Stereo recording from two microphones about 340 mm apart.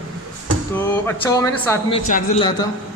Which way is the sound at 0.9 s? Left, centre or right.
Centre.